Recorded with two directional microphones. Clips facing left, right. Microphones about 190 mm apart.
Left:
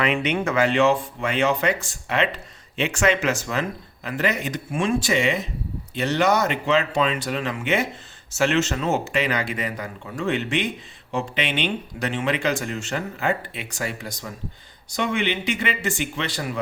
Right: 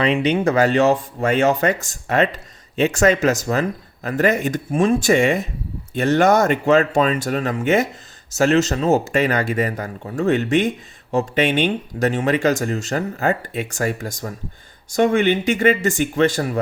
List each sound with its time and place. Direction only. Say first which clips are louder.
0.0 s speech: right 5 dB; 35° right (ahead or behind)